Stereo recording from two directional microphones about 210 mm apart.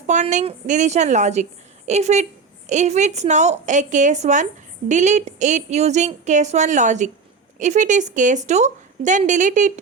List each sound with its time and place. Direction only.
0.1 s a woman's voice: 35° right (ahead or behind)